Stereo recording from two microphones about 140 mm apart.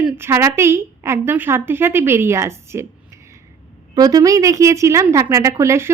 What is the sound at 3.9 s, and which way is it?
A woman's voice, 25° right (ahead or behind).